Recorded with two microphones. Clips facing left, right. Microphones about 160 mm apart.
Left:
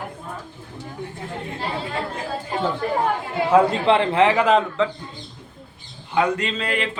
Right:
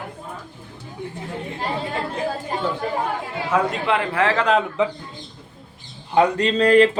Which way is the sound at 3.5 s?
30° left (ahead or behind).